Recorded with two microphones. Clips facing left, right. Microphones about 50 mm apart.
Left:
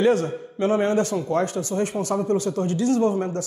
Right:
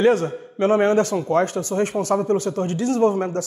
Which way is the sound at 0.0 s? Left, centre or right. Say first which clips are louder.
Right 2 dB; right.